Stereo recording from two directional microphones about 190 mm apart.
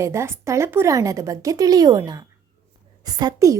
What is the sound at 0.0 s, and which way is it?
Speech, 15° right (ahead or behind).